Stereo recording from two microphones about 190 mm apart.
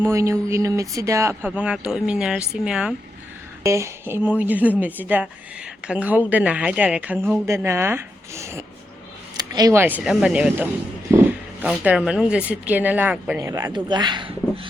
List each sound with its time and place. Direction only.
0.0 s speech: 15° right (ahead or behind)
3.6 s speech: 15° right (ahead or behind)
10.0 s speech: 5° right (ahead or behind); by 14.7 s 25° right (ahead or behind)